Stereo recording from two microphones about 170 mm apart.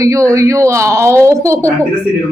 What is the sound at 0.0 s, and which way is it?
A woman's voice, 20° right (ahead or behind).